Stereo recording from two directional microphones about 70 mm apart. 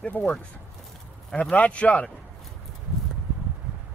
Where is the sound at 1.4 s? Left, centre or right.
Centre.